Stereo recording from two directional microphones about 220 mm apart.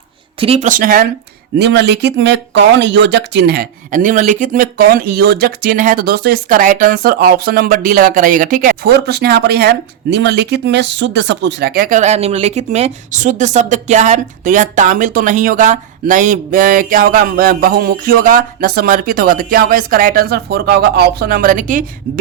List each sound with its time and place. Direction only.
0.3 s speech: 25° right (ahead or behind)